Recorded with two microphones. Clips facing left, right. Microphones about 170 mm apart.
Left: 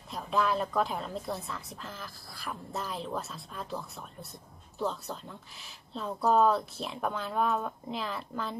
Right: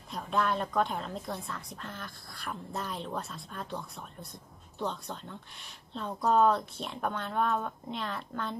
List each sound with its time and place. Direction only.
0.1 s a woman's voice: centre (ahead or behind)